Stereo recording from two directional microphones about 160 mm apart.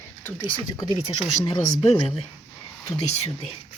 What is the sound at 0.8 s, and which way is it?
Speech, 35° left (ahead or behind).